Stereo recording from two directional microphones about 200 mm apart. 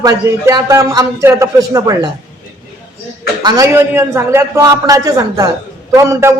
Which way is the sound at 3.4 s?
20° right (ahead or behind).